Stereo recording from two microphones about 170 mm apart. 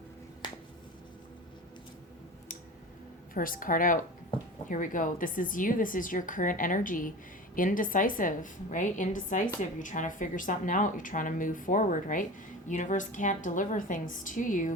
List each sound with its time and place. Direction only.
3.3 s a woman's voice: 55° left (ahead or behind)